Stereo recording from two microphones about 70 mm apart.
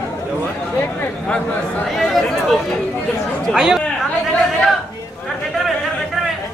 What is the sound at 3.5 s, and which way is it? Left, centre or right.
Speech, centre.